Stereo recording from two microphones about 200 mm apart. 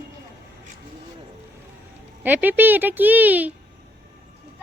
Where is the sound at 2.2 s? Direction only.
10° right (ahead or behind).